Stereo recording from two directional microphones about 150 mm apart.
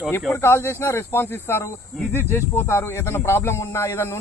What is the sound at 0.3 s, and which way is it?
Speech, 15° left (ahead or behind).